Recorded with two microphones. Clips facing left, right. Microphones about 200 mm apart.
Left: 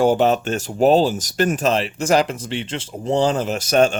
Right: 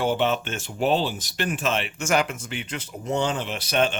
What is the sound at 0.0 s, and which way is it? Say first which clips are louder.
Speech: left 7 dB; 40° left (ahead or behind).